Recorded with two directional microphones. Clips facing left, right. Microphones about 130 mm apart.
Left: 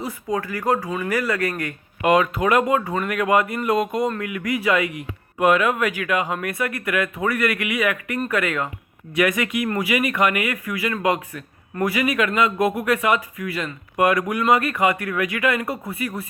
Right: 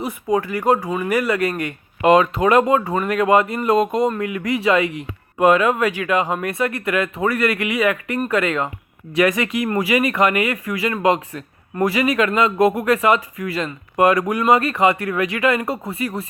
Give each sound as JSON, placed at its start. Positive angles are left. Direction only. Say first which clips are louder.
{"t": 0.0, "sound": "speech", "louder": "right 5 dB", "side_deg": -25}